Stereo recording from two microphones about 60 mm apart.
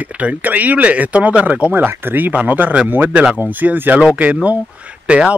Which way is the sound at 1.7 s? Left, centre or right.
Right.